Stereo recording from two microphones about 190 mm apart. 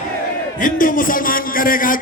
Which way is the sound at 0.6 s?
45° left (ahead or behind).